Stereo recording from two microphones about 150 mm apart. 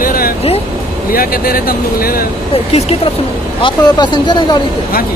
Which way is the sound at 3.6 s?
30° left (ahead or behind).